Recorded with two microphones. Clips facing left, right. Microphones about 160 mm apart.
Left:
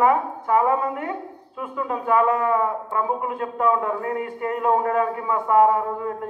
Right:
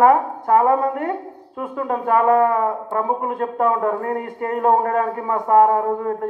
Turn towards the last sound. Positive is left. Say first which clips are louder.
# right 5 dB
turn(degrees=-45)  # may be behind; listen again after turning